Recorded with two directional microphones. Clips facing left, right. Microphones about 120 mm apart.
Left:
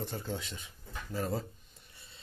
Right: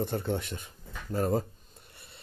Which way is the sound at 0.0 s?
60° right (ahead or behind).